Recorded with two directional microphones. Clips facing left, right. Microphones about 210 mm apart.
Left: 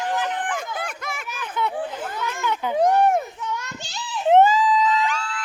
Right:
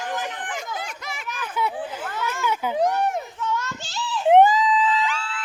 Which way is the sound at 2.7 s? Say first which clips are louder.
Left 6 dB; 50° left (ahead or behind).